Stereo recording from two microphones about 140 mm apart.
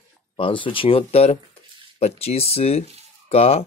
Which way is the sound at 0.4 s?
35° left (ahead or behind).